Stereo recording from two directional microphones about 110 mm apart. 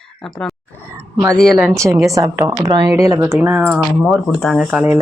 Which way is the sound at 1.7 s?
30° right (ahead or behind).